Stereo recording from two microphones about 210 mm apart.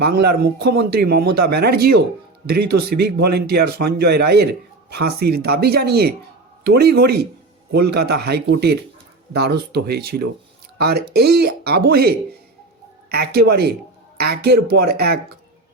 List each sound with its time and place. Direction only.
0.0 s speech: 50° right (ahead or behind)